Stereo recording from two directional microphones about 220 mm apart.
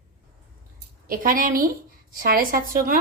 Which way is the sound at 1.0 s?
40° right (ahead or behind).